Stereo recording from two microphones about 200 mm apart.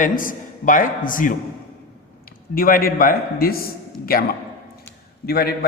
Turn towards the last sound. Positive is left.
turn(degrees=50)  # may be behind; listen again after turning